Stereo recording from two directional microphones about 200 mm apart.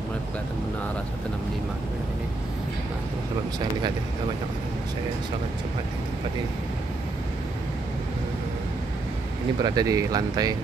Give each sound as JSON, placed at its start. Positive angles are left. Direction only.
{"t": 9.6, "sound": "speech", "side_deg": -20}